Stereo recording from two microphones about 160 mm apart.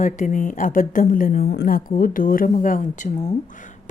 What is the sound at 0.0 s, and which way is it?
A woman's voice, 55° left (ahead or behind).